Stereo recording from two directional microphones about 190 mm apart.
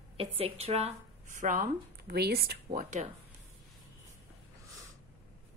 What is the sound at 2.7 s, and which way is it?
Speech, 40° right (ahead or behind).